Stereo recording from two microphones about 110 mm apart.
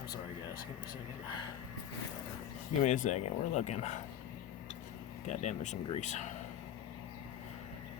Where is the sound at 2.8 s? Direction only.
90° left.